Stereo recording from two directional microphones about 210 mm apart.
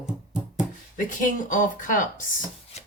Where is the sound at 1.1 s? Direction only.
40° left (ahead or behind).